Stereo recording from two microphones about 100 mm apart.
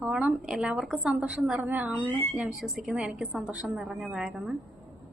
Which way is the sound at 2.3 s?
5° right (ahead or behind).